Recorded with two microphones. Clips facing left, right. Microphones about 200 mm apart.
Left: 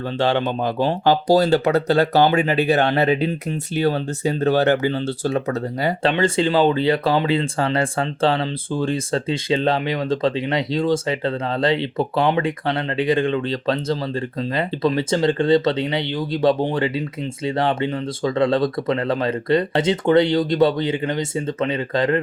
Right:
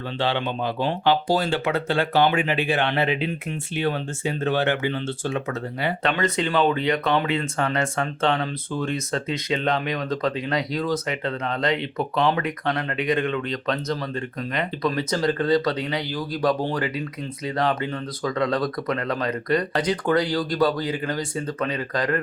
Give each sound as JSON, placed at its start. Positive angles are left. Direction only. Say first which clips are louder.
{"t": 0.2, "sound": "speech", "louder": "left 5 dB", "side_deg": 45}